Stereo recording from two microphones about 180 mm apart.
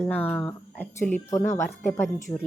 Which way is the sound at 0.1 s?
10° left (ahead or behind).